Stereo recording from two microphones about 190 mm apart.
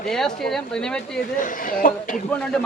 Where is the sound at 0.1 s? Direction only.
Centre (ahead or behind).